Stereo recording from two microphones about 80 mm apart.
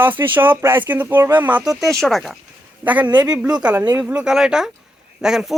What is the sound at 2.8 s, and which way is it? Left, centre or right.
Speech, centre.